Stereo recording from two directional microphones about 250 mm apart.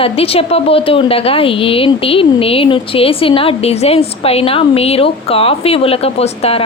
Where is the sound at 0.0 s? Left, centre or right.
Left.